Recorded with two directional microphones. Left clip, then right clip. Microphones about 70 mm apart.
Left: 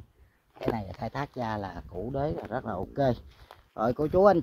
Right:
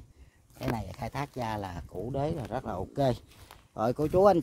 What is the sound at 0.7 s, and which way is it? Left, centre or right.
Speech, right.